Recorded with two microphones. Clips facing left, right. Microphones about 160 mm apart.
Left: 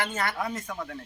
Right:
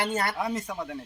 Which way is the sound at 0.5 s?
15° right (ahead or behind).